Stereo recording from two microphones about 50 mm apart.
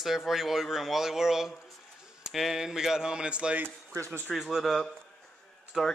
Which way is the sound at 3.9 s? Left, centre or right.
Right.